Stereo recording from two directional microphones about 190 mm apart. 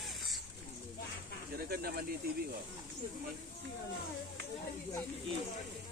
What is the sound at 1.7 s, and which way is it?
Speech, 55° right (ahead or behind).